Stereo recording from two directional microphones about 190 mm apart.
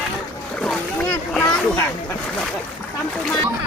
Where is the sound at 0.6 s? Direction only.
5° left (ahead or behind).